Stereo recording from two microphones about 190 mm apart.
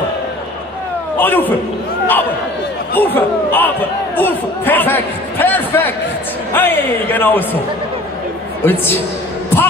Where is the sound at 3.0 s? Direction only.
10° left (ahead or behind).